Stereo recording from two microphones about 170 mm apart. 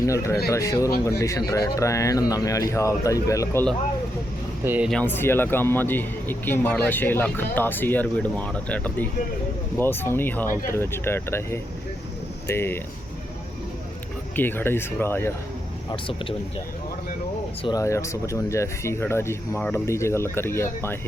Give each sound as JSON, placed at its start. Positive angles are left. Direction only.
{"t": 0.0, "sound": "a man's voice", "side_deg": 20}
{"t": 4.6, "sound": "speech", "side_deg": -10}
{"t": 4.9, "sound": "a man's voice", "side_deg": 10}
{"t": 14.3, "sound": "a man's voice", "side_deg": 10}
{"t": 15.9, "sound": "speech", "side_deg": 30}
{"t": 17.6, "sound": "a man's voice", "side_deg": 20}